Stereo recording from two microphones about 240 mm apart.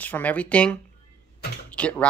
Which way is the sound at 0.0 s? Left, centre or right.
Centre.